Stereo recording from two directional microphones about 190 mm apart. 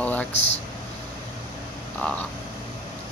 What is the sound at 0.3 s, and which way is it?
Speech, 35° left (ahead or behind).